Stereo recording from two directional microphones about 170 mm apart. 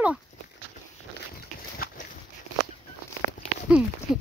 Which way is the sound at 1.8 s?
60° left (ahead or behind).